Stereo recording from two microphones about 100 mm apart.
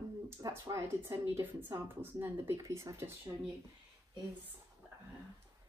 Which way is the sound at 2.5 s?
30° right (ahead or behind).